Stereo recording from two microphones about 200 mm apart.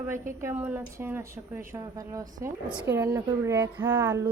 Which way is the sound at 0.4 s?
10° right (ahead or behind).